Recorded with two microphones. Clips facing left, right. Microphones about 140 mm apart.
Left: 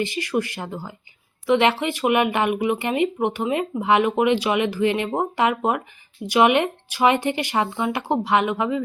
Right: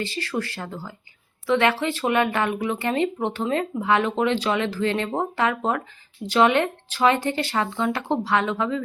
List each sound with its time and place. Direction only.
0.0 s speech: 15° left (ahead or behind)